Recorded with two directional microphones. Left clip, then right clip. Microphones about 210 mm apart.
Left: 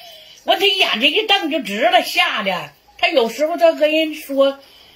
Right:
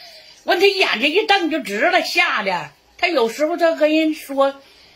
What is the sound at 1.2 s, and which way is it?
Speech, 50° right (ahead or behind).